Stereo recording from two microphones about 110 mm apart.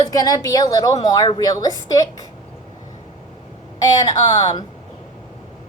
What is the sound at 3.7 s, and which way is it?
Speech, 35° left (ahead or behind).